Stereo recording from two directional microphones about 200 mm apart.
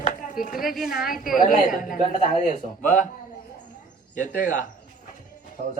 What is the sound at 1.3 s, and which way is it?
Speech, 45° left (ahead or behind).